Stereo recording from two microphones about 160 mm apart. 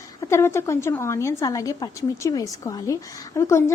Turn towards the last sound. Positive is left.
turn(degrees=20)  # may be behind; listen again after turning